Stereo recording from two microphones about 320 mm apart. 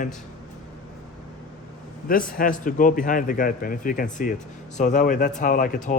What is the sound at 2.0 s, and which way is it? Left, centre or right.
A man's voice, left.